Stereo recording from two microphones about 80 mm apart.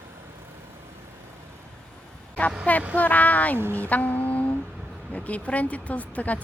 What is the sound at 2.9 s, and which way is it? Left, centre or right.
Speech, centre.